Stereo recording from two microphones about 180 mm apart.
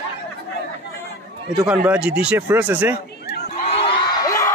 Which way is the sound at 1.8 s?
5° right (ahead or behind).